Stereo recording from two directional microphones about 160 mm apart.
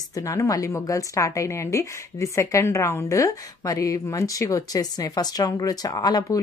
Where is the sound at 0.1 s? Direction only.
20° left (ahead or behind).